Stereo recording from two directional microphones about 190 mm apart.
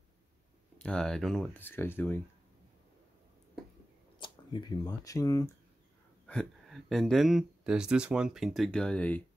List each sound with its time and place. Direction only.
0.7 s speech: 5° left (ahead or behind)
4.2 s speech: 25° left (ahead or behind)
6.2 s speech: 5° left (ahead or behind)